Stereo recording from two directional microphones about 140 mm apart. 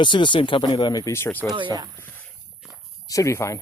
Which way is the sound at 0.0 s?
35° left (ahead or behind).